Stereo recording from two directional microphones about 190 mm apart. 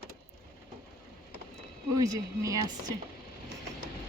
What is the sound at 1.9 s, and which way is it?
Speech, 15° right (ahead or behind).